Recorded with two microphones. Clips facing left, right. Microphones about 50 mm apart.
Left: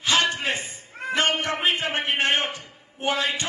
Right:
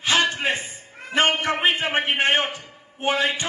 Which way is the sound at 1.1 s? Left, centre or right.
Right.